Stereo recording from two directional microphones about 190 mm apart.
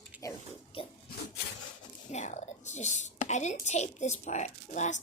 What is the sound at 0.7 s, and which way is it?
Speech, 30° left (ahead or behind).